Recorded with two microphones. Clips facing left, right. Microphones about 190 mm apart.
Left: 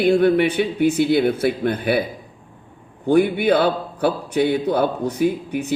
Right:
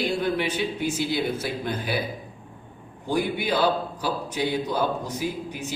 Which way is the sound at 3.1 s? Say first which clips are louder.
Left 9 dB; 60° left (ahead or behind).